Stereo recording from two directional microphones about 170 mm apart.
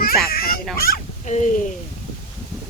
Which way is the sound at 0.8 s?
55° left (ahead or behind).